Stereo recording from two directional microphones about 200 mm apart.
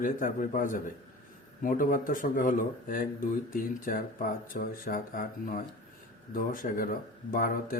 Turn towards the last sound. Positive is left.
turn(degrees=45)  # may be behind; listen again after turning